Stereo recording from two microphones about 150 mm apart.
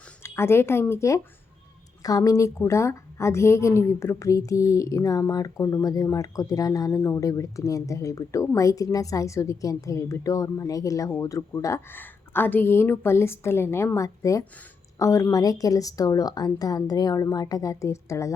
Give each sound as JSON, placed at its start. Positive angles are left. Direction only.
{"t": 0.2, "sound": "a woman's voice", "side_deg": 15}